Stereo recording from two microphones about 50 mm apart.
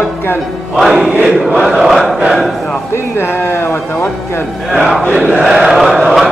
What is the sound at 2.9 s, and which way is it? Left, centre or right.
A man's voice, left.